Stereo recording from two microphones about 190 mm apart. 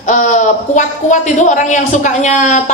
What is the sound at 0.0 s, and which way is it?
A man's voice, 40° left (ahead or behind).